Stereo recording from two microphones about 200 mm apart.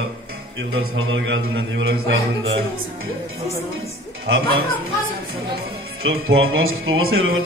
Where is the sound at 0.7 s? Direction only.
90° right; by 2.5 s 65° right (ahead or behind).